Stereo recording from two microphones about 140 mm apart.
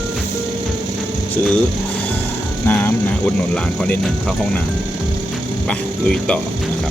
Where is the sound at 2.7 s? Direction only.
15° left (ahead or behind).